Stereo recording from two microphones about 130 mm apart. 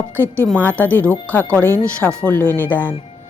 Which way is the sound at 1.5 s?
20° right (ahead or behind).